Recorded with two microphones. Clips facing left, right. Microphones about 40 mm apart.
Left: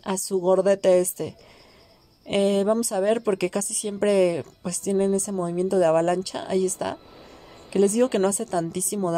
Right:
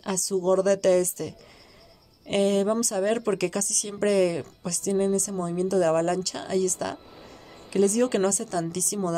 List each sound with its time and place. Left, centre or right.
0.0 s a woman's voice: left
3.3 s a woman's voice: left
7.1 s a sound: centre
7.7 s a woman's voice: left